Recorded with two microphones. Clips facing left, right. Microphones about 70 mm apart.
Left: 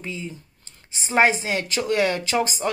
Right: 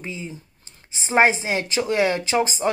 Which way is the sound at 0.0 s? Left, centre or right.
Centre.